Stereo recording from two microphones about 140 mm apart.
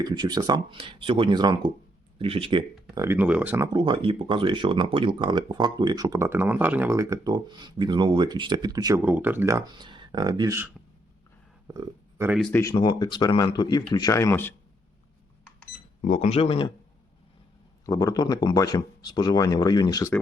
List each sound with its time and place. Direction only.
0.0 s speech: 30° right (ahead or behind)
2.9 s speech: 20° right (ahead or behind)
3.7 s speech: 35° right (ahead or behind)
9.0 s speech: 15° right (ahead or behind)
9.7 s speech: 35° right (ahead or behind)
11.7 s speech: 20° right (ahead or behind)
12.7 s speech: 35° left (ahead or behind); by 14.5 s 20° left (ahead or behind)
16.0 s speech: 55° left (ahead or behind)
17.8 s speech: 25° left (ahead or behind)